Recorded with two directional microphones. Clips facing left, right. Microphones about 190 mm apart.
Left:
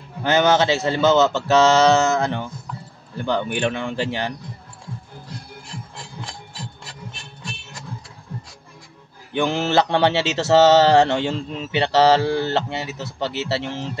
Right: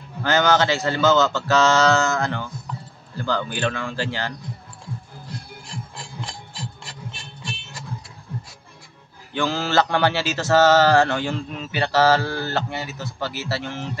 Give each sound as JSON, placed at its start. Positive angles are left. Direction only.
{"t": 0.2, "sound": "mantra", "side_deg": 20}
{"t": 9.3, "sound": "mantra", "side_deg": 20}